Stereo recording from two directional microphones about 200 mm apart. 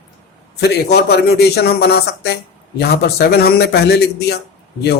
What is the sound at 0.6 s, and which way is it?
A man's voice, 55° left (ahead or behind).